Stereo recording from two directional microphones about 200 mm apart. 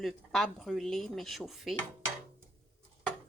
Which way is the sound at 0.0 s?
Centre (ahead or behind).